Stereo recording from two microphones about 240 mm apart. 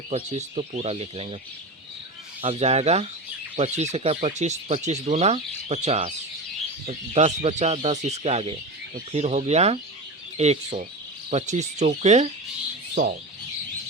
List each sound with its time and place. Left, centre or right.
0.1 s speech: right
2.4 s speech: right